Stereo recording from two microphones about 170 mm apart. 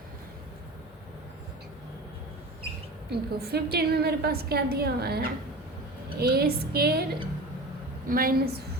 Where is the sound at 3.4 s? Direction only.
65° right (ahead or behind).